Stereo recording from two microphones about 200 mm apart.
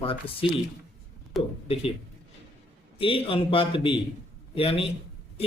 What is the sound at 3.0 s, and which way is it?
Speech, 25° left (ahead or behind).